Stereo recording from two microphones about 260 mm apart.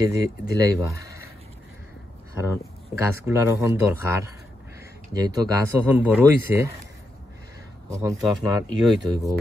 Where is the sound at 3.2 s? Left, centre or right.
Centre.